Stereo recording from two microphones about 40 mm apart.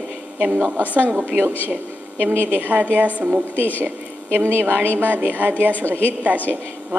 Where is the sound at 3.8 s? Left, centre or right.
Right.